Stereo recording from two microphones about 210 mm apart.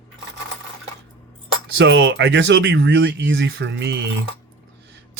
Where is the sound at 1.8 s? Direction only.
60° right (ahead or behind).